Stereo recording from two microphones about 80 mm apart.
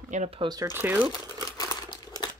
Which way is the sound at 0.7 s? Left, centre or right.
Right.